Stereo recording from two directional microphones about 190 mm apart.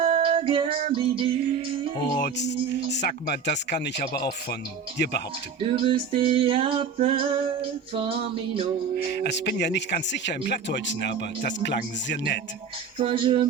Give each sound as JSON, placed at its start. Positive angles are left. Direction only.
{"t": 0.0, "sound": "music", "side_deg": -30}
{"t": 0.9, "sound": "female singing", "side_deg": -30}
{"t": 2.0, "sound": "music", "side_deg": 20}
{"t": 2.4, "sound": "speech", "side_deg": 65}
{"t": 5.6, "sound": "female singing", "side_deg": -25}
{"t": 9.2, "sound": "speech", "side_deg": 65}
{"t": 13.0, "sound": "female singing", "side_deg": -25}